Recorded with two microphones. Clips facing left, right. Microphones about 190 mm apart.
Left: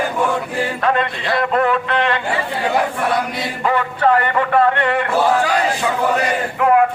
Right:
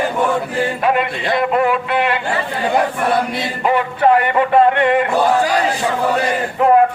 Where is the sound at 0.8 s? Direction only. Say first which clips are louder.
Right 2 dB; 15° right (ahead or behind).